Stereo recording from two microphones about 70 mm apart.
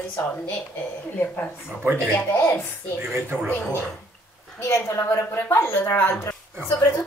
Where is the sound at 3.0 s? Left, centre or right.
Right.